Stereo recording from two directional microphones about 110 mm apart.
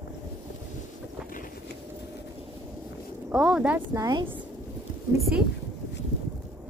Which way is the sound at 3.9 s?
35° right (ahead or behind).